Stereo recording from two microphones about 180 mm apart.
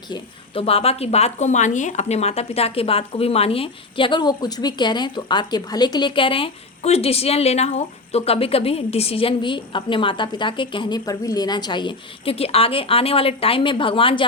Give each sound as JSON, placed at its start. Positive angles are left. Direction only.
{"t": 0.1, "sound": "a woman's voice", "side_deg": 30}